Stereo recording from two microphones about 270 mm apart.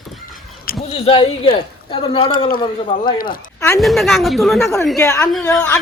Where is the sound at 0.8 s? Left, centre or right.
Left.